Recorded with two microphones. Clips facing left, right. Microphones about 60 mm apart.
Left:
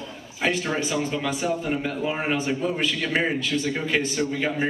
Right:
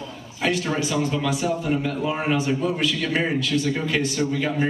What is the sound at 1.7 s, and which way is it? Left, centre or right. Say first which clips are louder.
A man's voice: right 2 dB; centre.